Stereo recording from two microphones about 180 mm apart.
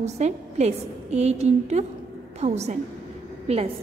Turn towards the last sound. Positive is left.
turn(degrees=-35)  # may be behind; listen again after turning